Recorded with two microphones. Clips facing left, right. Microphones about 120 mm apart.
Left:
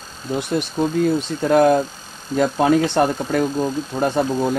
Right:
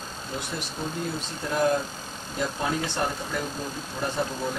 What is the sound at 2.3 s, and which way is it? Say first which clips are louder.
Speech: left 12 dB; 75° left (ahead or behind).